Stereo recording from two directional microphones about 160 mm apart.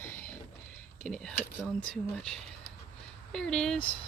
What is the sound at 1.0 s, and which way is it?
Speech, 5° left (ahead or behind).